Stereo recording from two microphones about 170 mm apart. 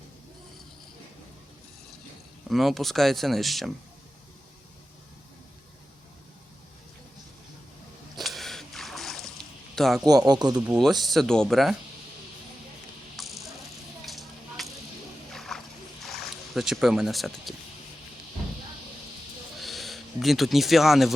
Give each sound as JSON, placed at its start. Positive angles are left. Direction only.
{"t": 2.5, "sound": "speech", "side_deg": 0}
{"t": 8.1, "sound": "a sound", "side_deg": 0}
{"t": 9.7, "sound": "speech", "side_deg": 0}
{"t": 10.1, "sound": "speech", "side_deg": -25}
{"t": 11.0, "sound": "speech", "side_deg": 0}
{"t": 13.1, "sound": "snake", "side_deg": 0}
{"t": 14.0, "sound": "a sound", "side_deg": 0}
{"t": 16.0, "sound": "speech", "side_deg": 0}
{"t": 19.5, "sound": "a sound", "side_deg": 0}